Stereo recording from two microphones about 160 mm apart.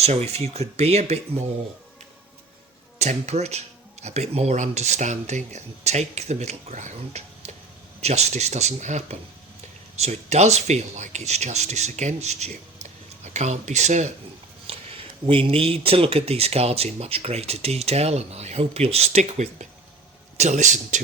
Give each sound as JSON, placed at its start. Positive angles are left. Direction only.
{"t": 0.0, "sound": "speech", "side_deg": -40}
{"t": 3.0, "sound": "speech", "side_deg": -45}
{"t": 14.7, "sound": "speech", "side_deg": -35}